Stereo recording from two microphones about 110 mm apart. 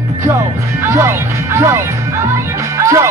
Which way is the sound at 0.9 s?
20° right (ahead or behind).